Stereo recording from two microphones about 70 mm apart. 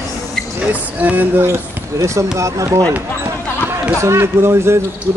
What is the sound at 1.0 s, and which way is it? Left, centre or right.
Speech, right.